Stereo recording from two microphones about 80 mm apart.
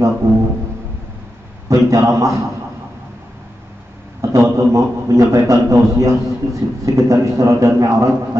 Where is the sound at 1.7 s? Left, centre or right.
Right.